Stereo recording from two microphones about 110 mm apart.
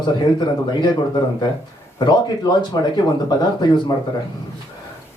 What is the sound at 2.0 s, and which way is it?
Speech, 40° left (ahead or behind).